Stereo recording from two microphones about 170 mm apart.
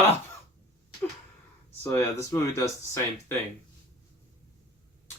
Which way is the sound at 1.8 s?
15° left (ahead or behind).